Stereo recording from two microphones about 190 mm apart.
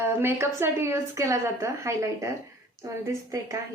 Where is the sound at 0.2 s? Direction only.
10° right (ahead or behind).